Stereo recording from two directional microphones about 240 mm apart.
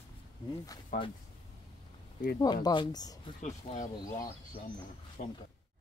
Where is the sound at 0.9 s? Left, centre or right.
Left.